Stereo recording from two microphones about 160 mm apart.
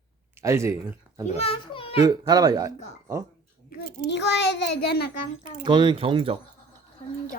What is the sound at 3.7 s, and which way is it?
A child's voice, 90° left.